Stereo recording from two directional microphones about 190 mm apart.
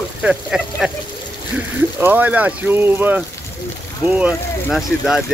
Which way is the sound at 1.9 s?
10° right (ahead or behind).